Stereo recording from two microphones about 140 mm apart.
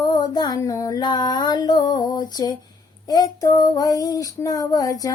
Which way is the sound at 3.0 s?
25° left (ahead or behind).